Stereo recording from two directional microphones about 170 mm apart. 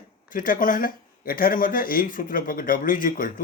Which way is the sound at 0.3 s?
55° left (ahead or behind).